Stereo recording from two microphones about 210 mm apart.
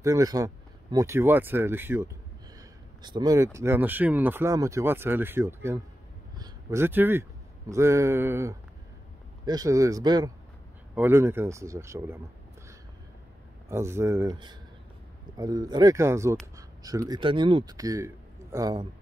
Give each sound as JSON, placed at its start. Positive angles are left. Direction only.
{"t": 0.0, "sound": "speech", "side_deg": -15}
{"t": 6.3, "sound": "a sound", "side_deg": -15}
{"t": 7.7, "sound": "speech", "side_deg": -15}
{"t": 13.7, "sound": "speech", "side_deg": -10}
{"t": 16.5, "sound": "a sound", "side_deg": -15}
{"t": 17.1, "sound": "a man's voice", "side_deg": -25}